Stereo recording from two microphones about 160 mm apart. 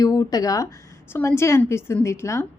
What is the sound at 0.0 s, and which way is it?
Speech, 20° left (ahead or behind).